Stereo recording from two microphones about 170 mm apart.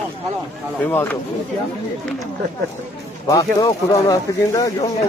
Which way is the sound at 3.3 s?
20° left (ahead or behind).